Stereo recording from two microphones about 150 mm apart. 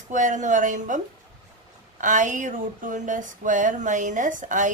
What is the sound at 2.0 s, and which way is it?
A woman's voice, 60° right (ahead or behind).